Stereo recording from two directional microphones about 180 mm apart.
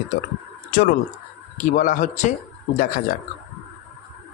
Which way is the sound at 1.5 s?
45° left (ahead or behind).